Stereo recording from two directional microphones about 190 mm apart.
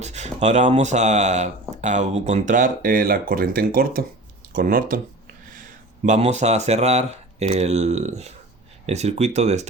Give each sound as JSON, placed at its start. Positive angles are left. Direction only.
{"t": 0.0, "sound": "speech", "side_deg": -35}
{"t": 6.0, "sound": "speech", "side_deg": -40}